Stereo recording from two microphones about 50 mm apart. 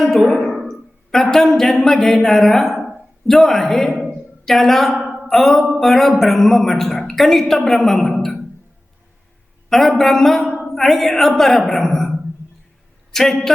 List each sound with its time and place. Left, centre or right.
1.1 s a woman's voice: centre
9.6 s a man's voice: centre
13.1 s speech: centre